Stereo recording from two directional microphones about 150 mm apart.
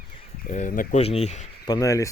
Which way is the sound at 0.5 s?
60° left (ahead or behind).